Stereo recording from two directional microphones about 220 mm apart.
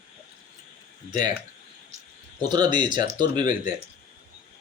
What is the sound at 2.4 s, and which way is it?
Speech, 20° right (ahead or behind).